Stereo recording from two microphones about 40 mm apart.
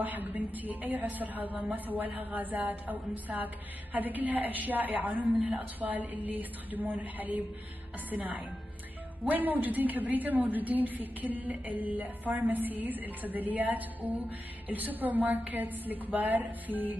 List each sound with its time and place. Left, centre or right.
0.0 s a woman's voice: right